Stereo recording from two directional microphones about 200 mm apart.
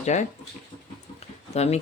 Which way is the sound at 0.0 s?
35° left (ahead or behind).